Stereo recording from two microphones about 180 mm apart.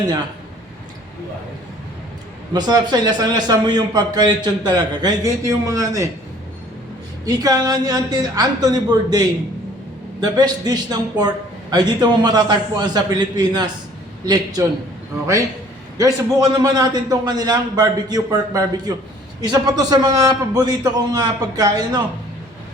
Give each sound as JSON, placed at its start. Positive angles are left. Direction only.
{"t": 2.5, "sound": "a man's voice", "side_deg": -20}
{"t": 7.3, "sound": "a man's voice", "side_deg": -20}
{"t": 16.0, "sound": "a man's voice", "side_deg": -20}